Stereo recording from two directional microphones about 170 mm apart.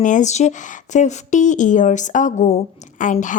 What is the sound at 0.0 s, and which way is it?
Speech, 45° left (ahead or behind).